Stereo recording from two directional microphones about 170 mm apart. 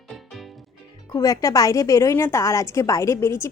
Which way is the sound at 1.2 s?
20° left (ahead or behind).